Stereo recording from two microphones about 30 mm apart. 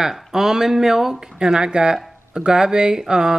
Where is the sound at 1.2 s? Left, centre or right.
Right.